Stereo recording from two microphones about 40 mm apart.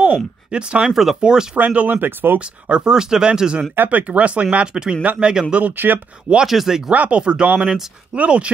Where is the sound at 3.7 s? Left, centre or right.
Right.